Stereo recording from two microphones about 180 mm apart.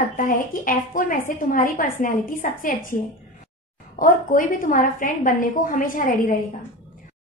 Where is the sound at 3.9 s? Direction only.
50° left (ahead or behind).